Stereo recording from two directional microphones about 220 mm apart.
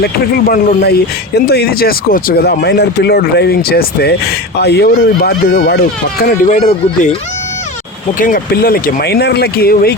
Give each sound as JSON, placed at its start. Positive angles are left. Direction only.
{"t": 0.0, "sound": "speech", "side_deg": 45}
{"t": 6.2, "sound": "speech", "side_deg": 35}
{"t": 8.2, "sound": "speech", "side_deg": 40}